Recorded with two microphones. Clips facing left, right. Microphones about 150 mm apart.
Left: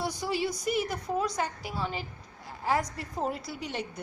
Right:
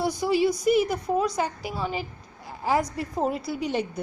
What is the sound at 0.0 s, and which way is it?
A woman's voice, 15° right (ahead or behind).